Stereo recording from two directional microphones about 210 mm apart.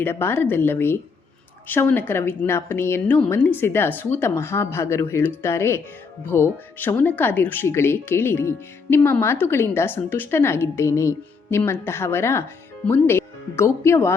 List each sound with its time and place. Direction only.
0.0 s speech: 10° left (ahead or behind)